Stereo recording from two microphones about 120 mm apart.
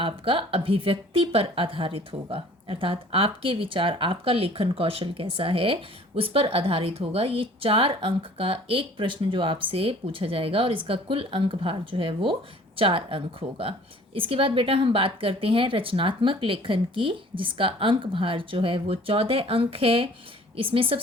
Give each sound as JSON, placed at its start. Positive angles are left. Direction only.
{"t": 0.0, "sound": "a woman's voice", "side_deg": -45}